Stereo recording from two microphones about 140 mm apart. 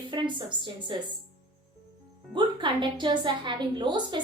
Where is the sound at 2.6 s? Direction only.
35° right (ahead or behind).